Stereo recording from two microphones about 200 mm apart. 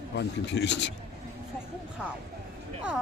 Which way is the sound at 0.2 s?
60° left (ahead or behind).